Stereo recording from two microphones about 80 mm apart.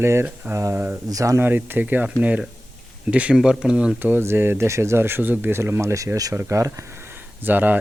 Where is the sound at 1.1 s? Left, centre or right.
Right.